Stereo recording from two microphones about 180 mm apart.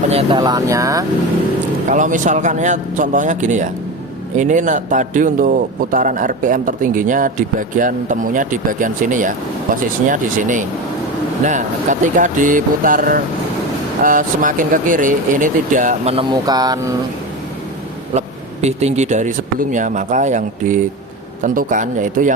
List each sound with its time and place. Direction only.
0.1 s speech: 30° right (ahead or behind)
1.9 s speech: 45° right (ahead or behind)
16.3 s speech: 20° right (ahead or behind)
18.6 s speech: 40° right (ahead or behind)